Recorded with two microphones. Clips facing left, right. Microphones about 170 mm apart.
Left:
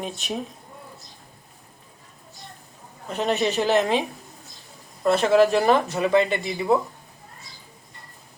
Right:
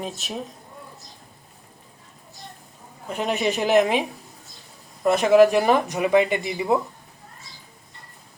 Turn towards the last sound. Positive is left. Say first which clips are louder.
# even
turn(degrees=-15)  # may be behind; listen again after turning